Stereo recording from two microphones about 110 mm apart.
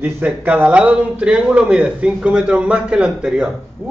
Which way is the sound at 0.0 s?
15° right (ahead or behind).